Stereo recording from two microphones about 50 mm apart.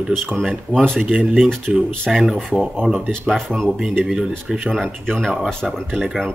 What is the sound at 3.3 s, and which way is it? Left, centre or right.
A man's voice, centre.